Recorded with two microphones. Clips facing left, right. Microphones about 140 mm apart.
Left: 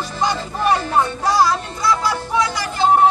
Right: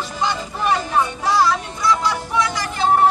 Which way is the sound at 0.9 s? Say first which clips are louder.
Left 1 dB; 40° left (ahead or behind).